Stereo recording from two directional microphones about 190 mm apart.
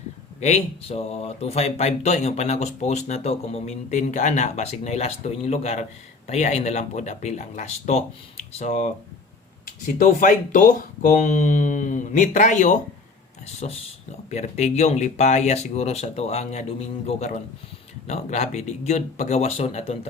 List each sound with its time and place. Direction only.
0.3 s speech: 35° left (ahead or behind)